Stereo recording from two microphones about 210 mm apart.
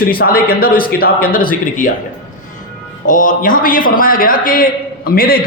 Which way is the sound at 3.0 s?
40° left (ahead or behind).